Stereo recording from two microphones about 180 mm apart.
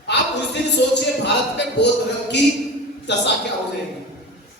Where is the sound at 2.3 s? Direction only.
70° left (ahead or behind).